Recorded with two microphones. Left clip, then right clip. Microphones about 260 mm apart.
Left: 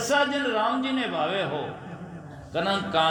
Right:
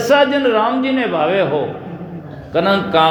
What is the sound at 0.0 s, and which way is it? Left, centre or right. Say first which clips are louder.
A man's voice: right 11 dB; centre.